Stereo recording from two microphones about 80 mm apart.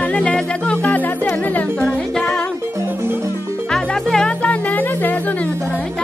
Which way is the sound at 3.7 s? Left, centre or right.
Centre.